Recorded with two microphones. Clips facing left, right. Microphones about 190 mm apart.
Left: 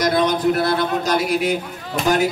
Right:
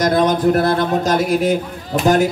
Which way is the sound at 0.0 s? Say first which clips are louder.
Right 3 dB; 50° right (ahead or behind).